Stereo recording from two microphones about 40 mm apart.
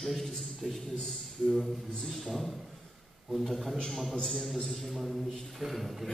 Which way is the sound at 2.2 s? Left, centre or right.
Centre.